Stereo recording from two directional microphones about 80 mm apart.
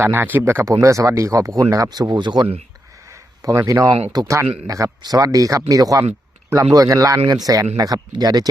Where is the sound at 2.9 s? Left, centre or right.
Right.